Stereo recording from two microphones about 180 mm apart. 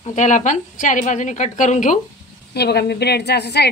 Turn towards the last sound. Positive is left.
turn(degrees=65)  # may be behind; listen again after turning